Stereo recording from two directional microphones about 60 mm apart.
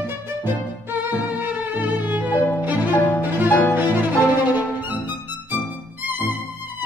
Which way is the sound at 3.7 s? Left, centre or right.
Right.